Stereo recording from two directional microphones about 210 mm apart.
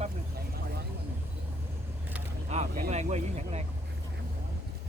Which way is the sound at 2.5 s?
35° right (ahead or behind).